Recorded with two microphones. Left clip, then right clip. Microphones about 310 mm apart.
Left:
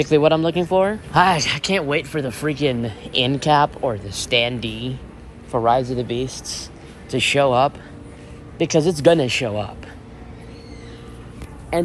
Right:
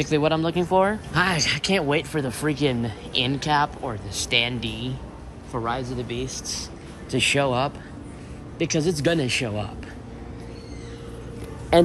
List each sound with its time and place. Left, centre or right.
0.0 s speech: centre
5.5 s speech: centre
11.7 s a man's voice: right